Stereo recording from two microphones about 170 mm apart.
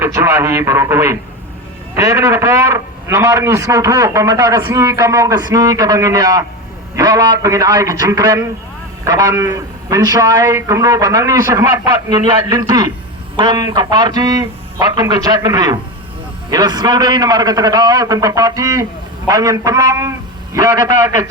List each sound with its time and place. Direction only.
0.0 s a man's voice: 15° right (ahead or behind)